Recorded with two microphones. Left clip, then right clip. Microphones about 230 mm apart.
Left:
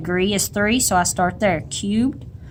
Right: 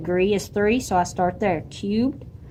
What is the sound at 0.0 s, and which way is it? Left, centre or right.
Speech, left.